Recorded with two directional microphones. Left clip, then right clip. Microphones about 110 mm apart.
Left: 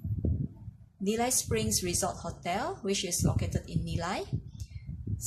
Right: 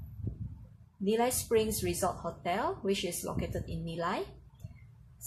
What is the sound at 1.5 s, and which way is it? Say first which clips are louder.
Speech: right 2 dB; 5° left (ahead or behind).